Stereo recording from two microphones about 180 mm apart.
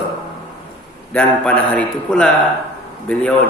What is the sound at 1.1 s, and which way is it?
A man's voice, 10° left (ahead or behind).